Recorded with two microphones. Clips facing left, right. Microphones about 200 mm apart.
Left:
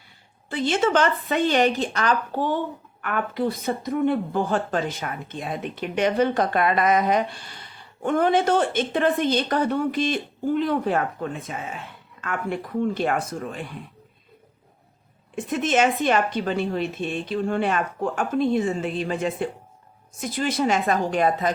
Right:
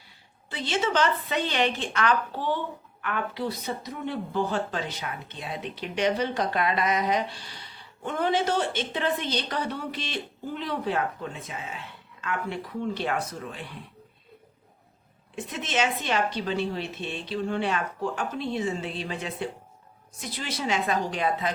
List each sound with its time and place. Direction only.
0.5 s a woman's voice: 50° left (ahead or behind)
15.4 s a woman's voice: 50° left (ahead or behind)